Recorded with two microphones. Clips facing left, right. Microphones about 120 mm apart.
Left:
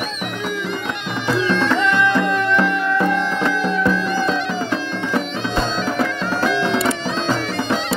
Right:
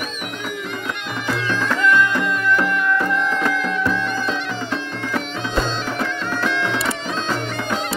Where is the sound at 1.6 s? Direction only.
75° left (ahead or behind).